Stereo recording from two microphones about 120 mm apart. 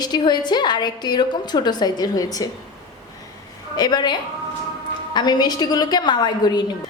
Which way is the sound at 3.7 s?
35° left (ahead or behind).